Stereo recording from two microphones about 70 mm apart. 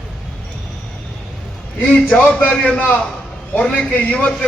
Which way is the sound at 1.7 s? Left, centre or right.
Centre.